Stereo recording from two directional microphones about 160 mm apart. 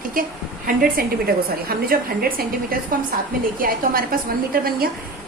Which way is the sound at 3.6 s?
65° right (ahead or behind).